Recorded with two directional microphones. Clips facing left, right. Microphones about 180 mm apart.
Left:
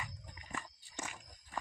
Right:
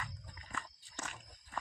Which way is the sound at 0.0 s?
15° left (ahead or behind).